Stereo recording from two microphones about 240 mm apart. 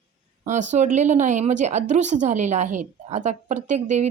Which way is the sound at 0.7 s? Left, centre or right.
Right.